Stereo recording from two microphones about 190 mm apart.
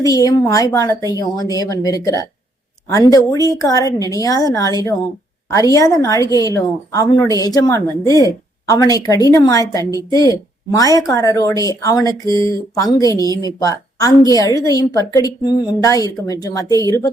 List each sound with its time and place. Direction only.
0.0 s a woman's voice: 20° left (ahead or behind)